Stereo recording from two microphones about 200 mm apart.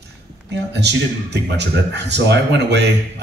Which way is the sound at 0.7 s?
60° right (ahead or behind).